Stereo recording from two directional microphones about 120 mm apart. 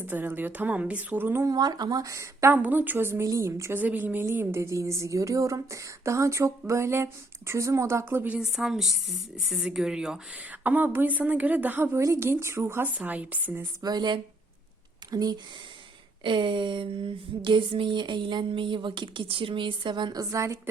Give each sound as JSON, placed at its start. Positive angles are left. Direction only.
{"t": 0.0, "sound": "a woman's voice", "side_deg": -15}
{"t": 1.5, "sound": "speech", "side_deg": -35}
{"t": 8.4, "sound": "a woman's voice", "side_deg": -5}
{"t": 13.8, "sound": "speech", "side_deg": -35}
{"t": 16.2, "sound": "a sound", "side_deg": -40}
{"t": 20.3, "sound": "speech", "side_deg": -25}